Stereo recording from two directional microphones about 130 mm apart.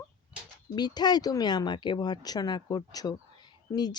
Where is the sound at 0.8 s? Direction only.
35° left (ahead or behind).